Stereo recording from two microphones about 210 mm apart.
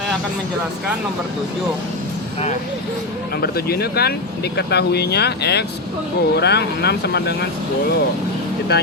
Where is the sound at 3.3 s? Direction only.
45° left (ahead or behind).